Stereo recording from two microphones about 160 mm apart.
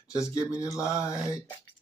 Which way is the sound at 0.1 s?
20° left (ahead or behind).